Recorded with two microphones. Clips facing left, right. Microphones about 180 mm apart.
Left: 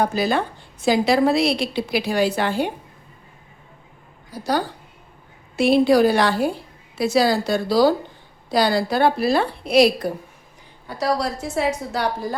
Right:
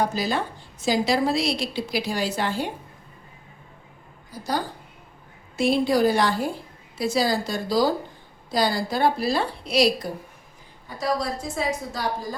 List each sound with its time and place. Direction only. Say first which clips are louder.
0.0 s a woman's voice: left 4 dB; 60° left (ahead or behind)
4.3 s a woman's voice: left 5 dB; 70° left (ahead or behind)
10.8 s a woman's voice: left 3 dB; 75° left (ahead or behind)